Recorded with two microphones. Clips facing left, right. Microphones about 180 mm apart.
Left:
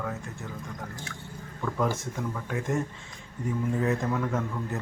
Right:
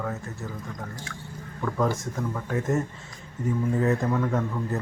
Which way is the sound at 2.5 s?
5° right (ahead or behind).